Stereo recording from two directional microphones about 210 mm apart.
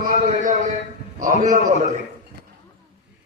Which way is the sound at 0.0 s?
40° right (ahead or behind).